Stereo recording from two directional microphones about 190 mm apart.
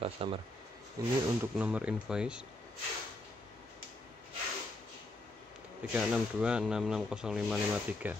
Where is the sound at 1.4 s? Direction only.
5° right (ahead or behind).